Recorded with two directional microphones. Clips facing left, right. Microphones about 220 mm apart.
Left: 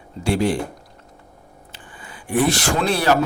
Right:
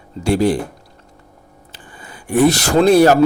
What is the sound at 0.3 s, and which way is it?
Speech, 40° right (ahead or behind).